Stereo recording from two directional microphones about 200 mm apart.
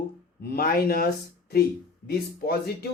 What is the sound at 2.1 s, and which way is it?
Speech, 50° left (ahead or behind).